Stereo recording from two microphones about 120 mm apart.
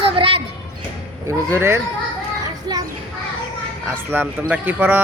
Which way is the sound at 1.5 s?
20° right (ahead or behind).